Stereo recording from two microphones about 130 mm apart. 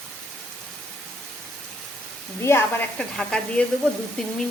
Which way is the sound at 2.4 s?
15° left (ahead or behind).